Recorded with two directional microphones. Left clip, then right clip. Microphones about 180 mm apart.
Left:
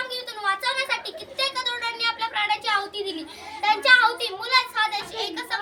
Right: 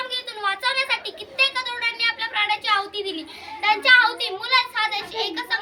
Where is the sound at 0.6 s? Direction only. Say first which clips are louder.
Right 3 dB; 15° left (ahead or behind).